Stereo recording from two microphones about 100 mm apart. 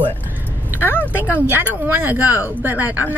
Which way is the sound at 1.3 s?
20° right (ahead or behind).